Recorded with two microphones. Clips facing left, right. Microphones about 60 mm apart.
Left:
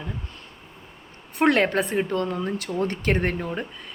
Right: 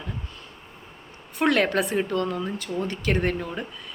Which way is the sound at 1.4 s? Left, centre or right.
Left.